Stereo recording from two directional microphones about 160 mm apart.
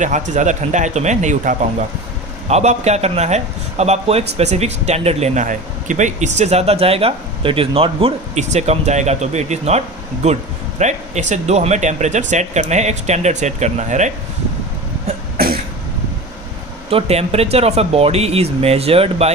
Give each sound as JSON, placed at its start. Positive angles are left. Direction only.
{"t": 0.0, "sound": "speech", "side_deg": -50}
{"t": 16.9, "sound": "speech", "side_deg": -40}